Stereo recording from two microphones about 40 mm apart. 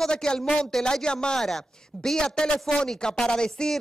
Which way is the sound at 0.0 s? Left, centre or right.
Centre.